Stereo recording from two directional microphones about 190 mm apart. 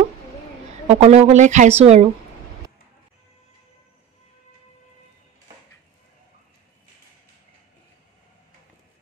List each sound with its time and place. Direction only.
0.8 s speech: 35° right (ahead or behind)